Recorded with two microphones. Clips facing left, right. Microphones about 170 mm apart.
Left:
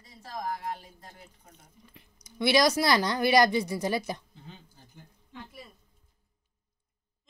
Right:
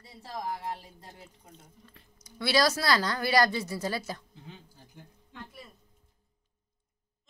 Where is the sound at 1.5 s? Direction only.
15° left (ahead or behind).